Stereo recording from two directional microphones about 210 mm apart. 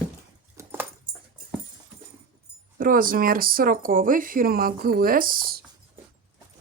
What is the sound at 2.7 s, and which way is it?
Speech, 40° right (ahead or behind).